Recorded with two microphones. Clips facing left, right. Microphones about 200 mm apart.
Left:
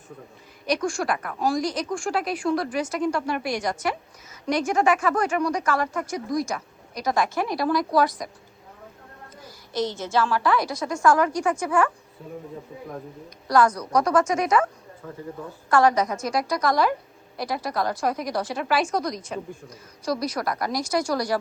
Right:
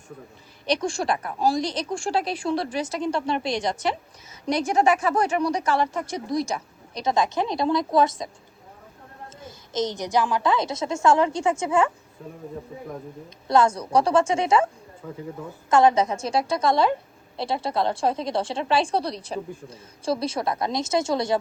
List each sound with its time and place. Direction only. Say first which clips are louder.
0.7 s a woman's voice: even; 25° right (ahead or behind)
9.3 s a woman's voice: right 1 dB; 25° right (ahead or behind)
12.2 s a man's voice: left 1 dB; centre (ahead or behind)
13.5 s a woman's voice: right 1 dB; 25° right (ahead or behind)
15.0 s speech: right 2 dB; 10° right (ahead or behind)
15.7 s a woman's voice: right 2 dB; 25° right (ahead or behind)